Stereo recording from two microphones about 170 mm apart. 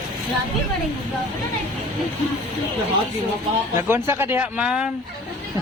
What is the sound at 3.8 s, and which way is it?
Speech, 15° right (ahead or behind).